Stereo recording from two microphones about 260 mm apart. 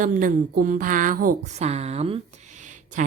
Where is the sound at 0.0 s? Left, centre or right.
Right.